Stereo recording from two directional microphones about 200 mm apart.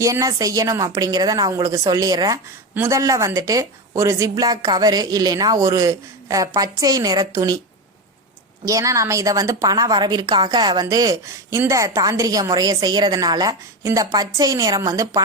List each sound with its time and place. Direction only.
0.0 s a woman's voice: 15° right (ahead or behind)
8.6 s a woman's voice: 15° right (ahead or behind)